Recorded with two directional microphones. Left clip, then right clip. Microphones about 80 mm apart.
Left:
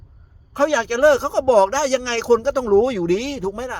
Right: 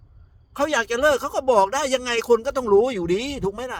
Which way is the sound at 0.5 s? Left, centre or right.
Right.